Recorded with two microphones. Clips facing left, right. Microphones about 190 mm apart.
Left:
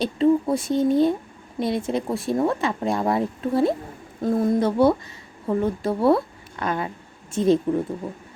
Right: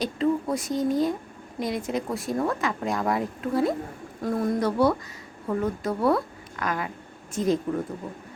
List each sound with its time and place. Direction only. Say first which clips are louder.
0.0 s a woman's voice: left 5 dB; 30° left (ahead or behind)